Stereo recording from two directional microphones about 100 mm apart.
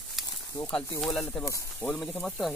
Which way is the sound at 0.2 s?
Centre (ahead or behind).